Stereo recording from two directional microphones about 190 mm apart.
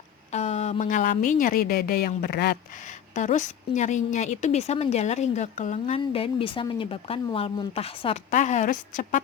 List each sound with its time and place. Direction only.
0.3 s a woman's voice: 35° left (ahead or behind)